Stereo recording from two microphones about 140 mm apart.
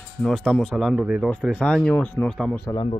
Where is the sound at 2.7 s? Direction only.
35° left (ahead or behind).